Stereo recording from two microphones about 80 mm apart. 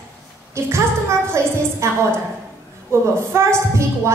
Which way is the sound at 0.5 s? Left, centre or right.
Right.